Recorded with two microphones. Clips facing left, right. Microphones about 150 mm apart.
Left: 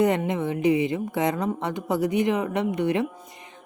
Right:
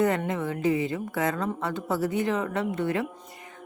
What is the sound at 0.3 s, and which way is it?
A woman's voice, 20° left (ahead or behind).